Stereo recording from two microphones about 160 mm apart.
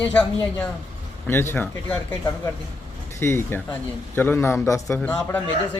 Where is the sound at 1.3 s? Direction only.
15° left (ahead or behind).